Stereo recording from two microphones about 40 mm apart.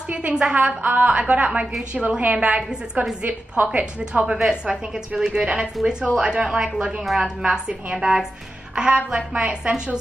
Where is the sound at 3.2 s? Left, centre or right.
Right.